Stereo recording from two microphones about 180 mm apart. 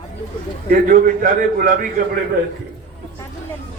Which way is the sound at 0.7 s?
50° right (ahead or behind).